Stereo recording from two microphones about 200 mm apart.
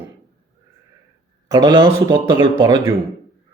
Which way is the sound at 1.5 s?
20° right (ahead or behind).